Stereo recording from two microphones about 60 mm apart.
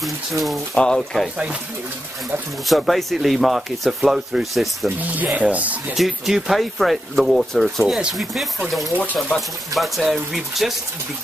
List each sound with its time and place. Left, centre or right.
0.0 s speech: centre
2.6 s speech: centre
4.9 s speech: right
5.9 s speech: centre
8.9 s speech: left
9.8 s speech: centre